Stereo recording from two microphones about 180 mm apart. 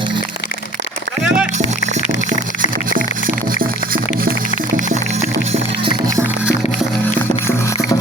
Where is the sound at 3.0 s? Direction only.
50° right (ahead or behind).